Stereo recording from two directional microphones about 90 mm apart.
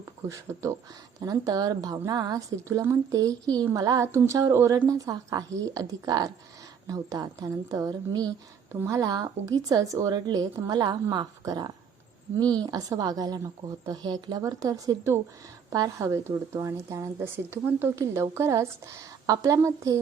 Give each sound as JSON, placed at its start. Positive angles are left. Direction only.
{"t": 0.3, "sound": "a woman's voice", "side_deg": -35}
{"t": 2.6, "sound": "speech", "side_deg": -35}
{"t": 9.0, "sound": "a woman's voice", "side_deg": -45}
{"t": 17.2, "sound": "speech", "side_deg": -25}